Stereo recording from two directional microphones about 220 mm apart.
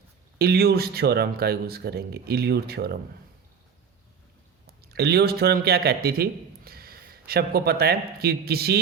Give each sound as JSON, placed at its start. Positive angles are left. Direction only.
{"t": 0.3, "sound": "speech", "side_deg": -45}
{"t": 4.6, "sound": "speech", "side_deg": -45}